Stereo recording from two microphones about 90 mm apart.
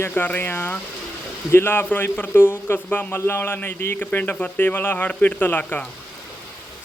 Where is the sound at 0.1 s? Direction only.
15° left (ahead or behind).